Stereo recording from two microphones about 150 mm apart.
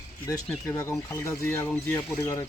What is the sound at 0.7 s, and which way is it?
Speech, 20° left (ahead or behind).